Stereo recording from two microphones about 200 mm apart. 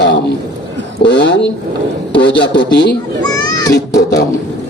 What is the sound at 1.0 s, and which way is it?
A man's voice, 60° left (ahead or behind).